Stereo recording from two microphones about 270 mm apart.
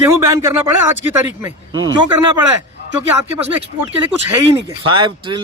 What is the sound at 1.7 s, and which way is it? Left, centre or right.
Speech, right.